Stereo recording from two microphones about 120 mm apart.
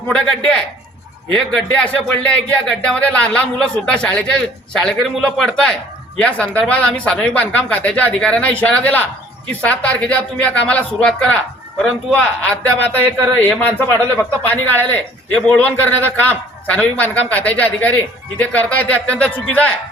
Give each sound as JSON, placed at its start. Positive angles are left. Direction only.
{"t": 0.1, "sound": "a man's voice", "side_deg": 5}